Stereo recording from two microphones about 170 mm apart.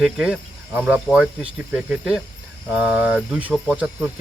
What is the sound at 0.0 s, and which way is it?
Cricket, 5° right (ahead or behind).